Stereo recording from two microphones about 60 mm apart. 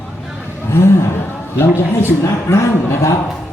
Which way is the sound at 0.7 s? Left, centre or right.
Left.